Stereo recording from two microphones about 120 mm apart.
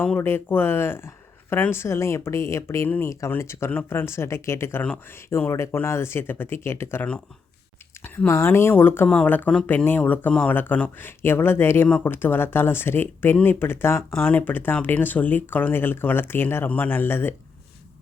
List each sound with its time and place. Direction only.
0.0 s speech: 15° left (ahead or behind)